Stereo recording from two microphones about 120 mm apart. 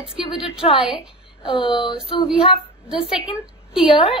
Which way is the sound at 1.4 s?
45° left (ahead or behind).